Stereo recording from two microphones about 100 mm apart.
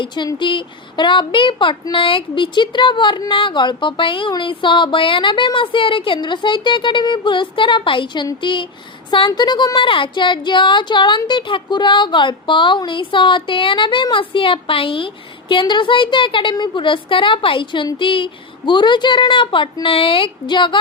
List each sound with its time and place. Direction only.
0.3 s a woman's voice: 50° left (ahead or behind)